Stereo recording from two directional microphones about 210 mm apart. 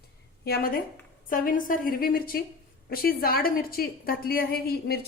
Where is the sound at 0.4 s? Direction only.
45° left (ahead or behind).